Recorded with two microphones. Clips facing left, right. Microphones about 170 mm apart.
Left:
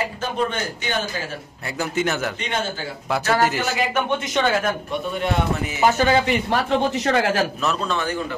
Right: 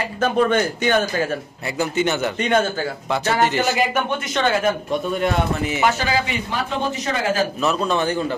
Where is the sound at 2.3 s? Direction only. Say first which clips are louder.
Right 7 dB; 50° right (ahead or behind).